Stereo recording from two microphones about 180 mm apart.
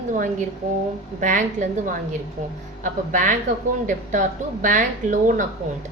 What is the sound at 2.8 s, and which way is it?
Speech, 45° right (ahead or behind).